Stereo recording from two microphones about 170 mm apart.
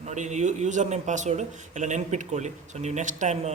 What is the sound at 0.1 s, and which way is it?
A man's voice, 45° right (ahead or behind).